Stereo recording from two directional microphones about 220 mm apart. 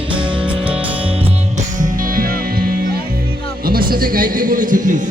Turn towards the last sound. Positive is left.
turn(degrees=-35)  # may be behind; listen again after turning